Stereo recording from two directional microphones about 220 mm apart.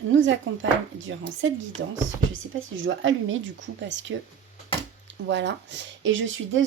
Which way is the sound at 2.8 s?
60° right (ahead or behind).